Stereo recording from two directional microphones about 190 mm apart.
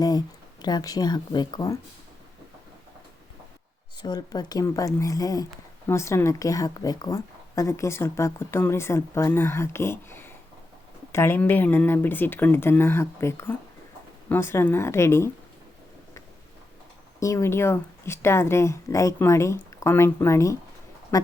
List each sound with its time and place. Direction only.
0.0 s speech: 20° left (ahead or behind)
4.0 s speech: 20° left (ahead or behind)
17.2 s speech: 15° left (ahead or behind)